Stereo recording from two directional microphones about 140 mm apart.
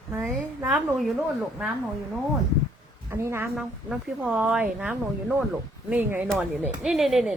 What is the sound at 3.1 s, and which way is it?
Speech, 15° right (ahead or behind).